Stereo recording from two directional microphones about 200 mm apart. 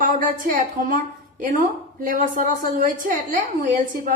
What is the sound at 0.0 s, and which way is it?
Speech, 40° right (ahead or behind).